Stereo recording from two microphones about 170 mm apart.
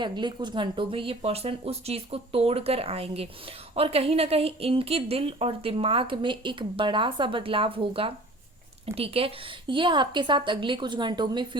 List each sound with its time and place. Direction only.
0.0 s a woman's voice: 25° right (ahead or behind)